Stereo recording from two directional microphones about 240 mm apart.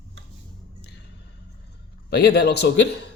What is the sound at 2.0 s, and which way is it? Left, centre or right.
Speech, left.